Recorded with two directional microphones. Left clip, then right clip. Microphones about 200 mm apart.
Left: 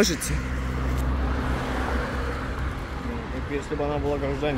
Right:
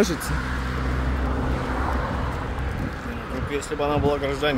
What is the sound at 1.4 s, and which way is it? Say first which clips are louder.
Vehicle: right 1 dB; 45° left (ahead or behind).